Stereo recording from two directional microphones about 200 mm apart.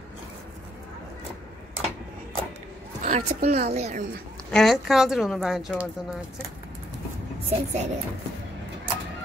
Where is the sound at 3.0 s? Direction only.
35° right (ahead or behind).